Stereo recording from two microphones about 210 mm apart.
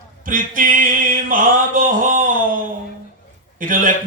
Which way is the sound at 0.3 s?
40° right (ahead or behind).